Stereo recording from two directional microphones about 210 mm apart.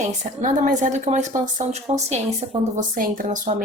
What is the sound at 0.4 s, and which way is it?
A woman's voice, 35° right (ahead or behind).